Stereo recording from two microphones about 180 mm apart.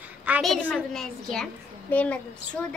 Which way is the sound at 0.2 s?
5° right (ahead or behind).